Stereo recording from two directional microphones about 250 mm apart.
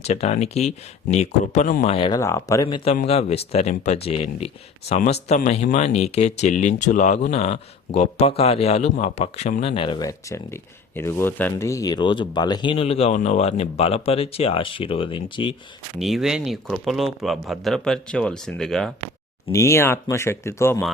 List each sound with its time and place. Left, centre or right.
0.0 s speech: left
16.0 s speech: centre